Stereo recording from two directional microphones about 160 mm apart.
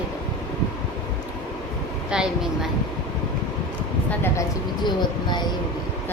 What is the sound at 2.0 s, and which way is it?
Speech, 5° right (ahead or behind).